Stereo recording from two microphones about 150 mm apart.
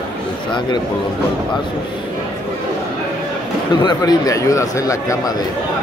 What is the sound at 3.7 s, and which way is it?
A man's voice, 30° left (ahead or behind).